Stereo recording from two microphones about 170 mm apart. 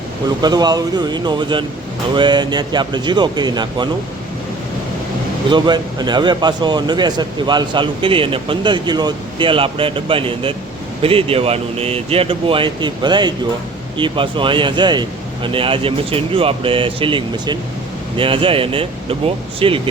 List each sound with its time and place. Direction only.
0.4 s a man's voice: 25° right (ahead or behind)
5.5 s a man's voice: 25° right (ahead or behind)